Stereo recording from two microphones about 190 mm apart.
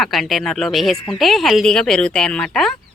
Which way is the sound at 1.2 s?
Centre (ahead or behind).